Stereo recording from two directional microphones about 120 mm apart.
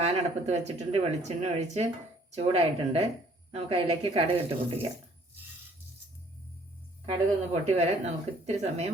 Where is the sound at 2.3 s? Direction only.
60° right (ahead or behind).